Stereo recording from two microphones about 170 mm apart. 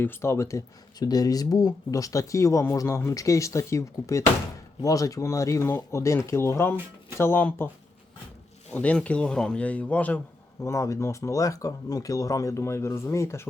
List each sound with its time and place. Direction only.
0.0 s speech: 15° left (ahead or behind)
8.7 s speech: 10° left (ahead or behind)